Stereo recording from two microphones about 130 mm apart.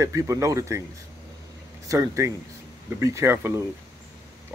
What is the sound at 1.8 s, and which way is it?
Speech, 25° right (ahead or behind).